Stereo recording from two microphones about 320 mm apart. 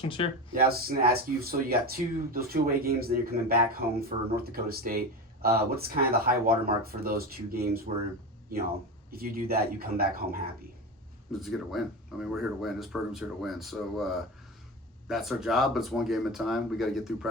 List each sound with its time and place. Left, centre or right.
0.0 s speech: centre
0.5 s speech: right
11.3 s speech: centre